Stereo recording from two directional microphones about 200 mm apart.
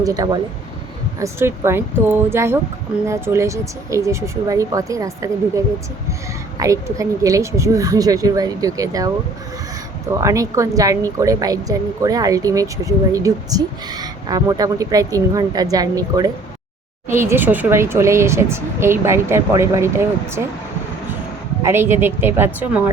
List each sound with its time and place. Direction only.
0.0 s speech: 20° right (ahead or behind)
10.2 s speech: 15° right (ahead or behind)
21.6 s speech: 10° right (ahead or behind)